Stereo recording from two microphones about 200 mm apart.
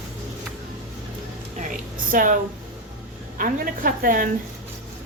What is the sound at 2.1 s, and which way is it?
Speech, 40° right (ahead or behind).